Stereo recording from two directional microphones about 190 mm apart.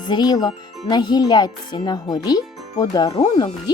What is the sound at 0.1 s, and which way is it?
Speech, 20° left (ahead or behind).